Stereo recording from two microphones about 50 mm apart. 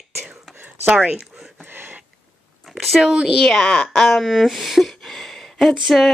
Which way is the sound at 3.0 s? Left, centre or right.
Centre.